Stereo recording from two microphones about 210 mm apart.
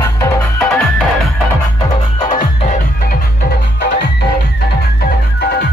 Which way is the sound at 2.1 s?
20° left (ahead or behind).